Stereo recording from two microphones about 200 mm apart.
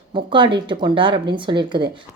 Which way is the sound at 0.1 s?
25° right (ahead or behind).